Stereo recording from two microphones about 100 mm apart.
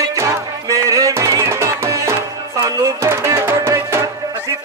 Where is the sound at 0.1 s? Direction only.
30° right (ahead or behind).